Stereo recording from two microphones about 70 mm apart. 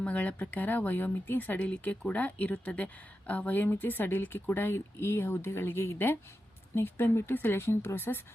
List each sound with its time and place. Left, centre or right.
0.0 s speech: left